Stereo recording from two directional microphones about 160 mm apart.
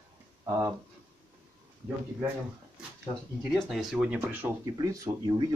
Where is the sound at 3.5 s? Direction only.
Centre (ahead or behind).